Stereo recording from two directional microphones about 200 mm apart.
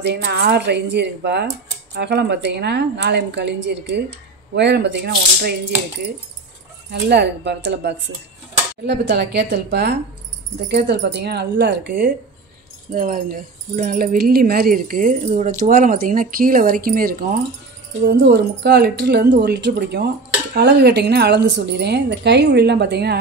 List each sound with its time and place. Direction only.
0.0 s speech: 55° right (ahead or behind)
6.9 s speech: 60° right (ahead or behind)
12.9 s speech: 45° right (ahead or behind)
18.0 s speech: 60° right (ahead or behind)